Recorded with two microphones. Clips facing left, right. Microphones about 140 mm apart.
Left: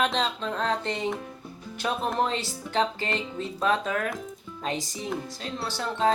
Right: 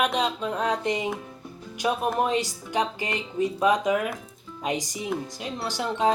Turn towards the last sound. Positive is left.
turn(degrees=-15)  # may be behind; listen again after turning